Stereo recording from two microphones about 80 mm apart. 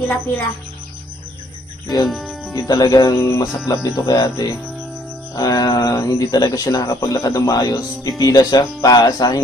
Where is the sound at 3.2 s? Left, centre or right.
Left.